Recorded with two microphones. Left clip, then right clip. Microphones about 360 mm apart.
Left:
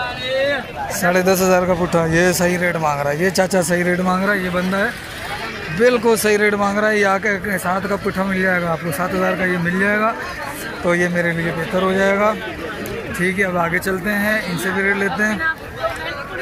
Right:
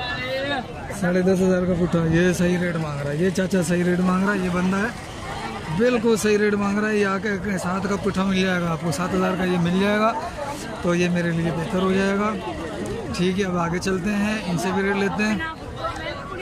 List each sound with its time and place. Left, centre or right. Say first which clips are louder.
1.0 s speech: left 6 dB; left
1.5 s speech: left 7 dB; centre